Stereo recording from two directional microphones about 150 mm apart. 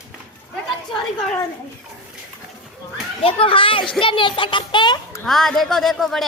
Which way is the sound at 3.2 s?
35° left (ahead or behind).